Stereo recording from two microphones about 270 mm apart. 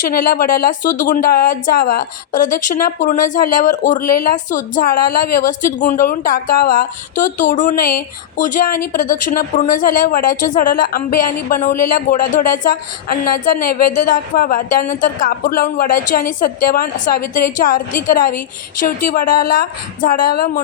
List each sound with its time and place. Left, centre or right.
0.0 s a woman's voice: left